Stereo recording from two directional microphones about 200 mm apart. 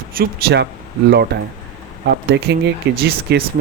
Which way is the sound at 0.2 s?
55° right (ahead or behind).